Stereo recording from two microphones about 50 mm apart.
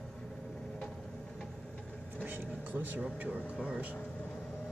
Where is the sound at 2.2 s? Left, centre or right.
Right.